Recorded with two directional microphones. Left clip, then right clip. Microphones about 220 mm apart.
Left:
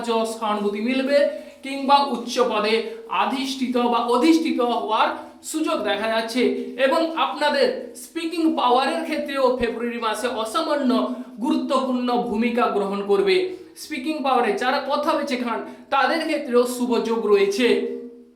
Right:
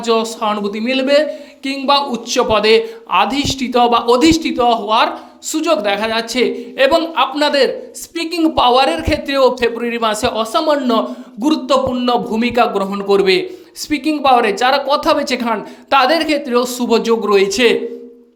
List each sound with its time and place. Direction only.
0.0 s a woman's voice: 45° right (ahead or behind)